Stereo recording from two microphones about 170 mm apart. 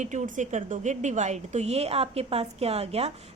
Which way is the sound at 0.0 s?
45° right (ahead or behind).